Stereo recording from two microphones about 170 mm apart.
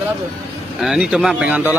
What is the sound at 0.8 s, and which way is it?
Speech, centre (ahead or behind).